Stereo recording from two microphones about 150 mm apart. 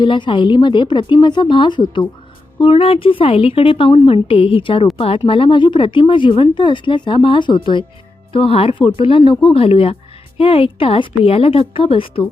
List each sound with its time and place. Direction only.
0.0 s speech: 30° left (ahead or behind)